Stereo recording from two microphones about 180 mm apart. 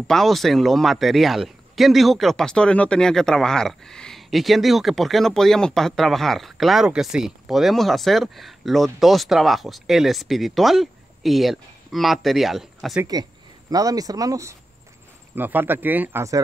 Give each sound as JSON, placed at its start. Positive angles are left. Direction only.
{"t": 0.1, "sound": "a man's voice", "side_deg": 0}
{"t": 13.0, "sound": "speech", "side_deg": -20}